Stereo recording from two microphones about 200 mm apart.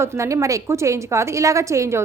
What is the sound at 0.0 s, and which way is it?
A woman's voice, 15° right (ahead or behind).